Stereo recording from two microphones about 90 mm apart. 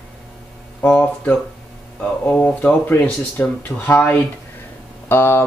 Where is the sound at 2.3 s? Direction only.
15° left (ahead or behind).